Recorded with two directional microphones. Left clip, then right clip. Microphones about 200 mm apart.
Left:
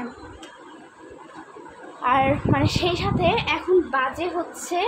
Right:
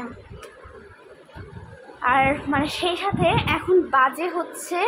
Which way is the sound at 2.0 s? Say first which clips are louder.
Right 1 dB; 15° left (ahead or behind).